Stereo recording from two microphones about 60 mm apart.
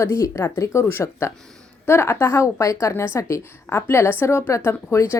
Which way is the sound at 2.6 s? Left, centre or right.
Left.